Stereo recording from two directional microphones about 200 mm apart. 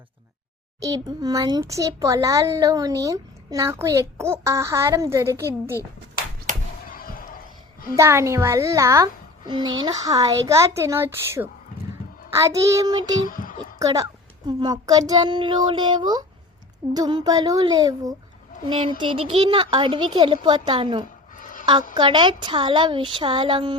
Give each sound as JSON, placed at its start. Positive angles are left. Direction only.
{"t": 0.8, "sound": "a child's voice", "side_deg": -20}
{"t": 6.8, "sound": "slam", "side_deg": 45}
{"t": 7.9, "sound": "a child's voice", "side_deg": -15}
{"t": 13.2, "sound": "a sound", "side_deg": 40}
{"t": 13.7, "sound": "a child's voice", "side_deg": -15}
{"t": 21.3, "sound": "a sound", "side_deg": 40}
{"t": 21.9, "sound": "a child's voice", "side_deg": -25}